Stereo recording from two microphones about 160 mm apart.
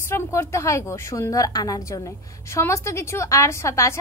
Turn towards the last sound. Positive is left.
turn(degrees=20)  # may be behind; listen again after turning